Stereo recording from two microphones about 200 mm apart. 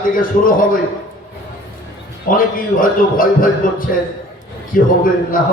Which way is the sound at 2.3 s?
45° left (ahead or behind).